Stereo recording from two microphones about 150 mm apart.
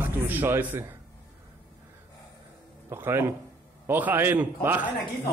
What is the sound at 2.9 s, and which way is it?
A man's voice, 15° right (ahead or behind).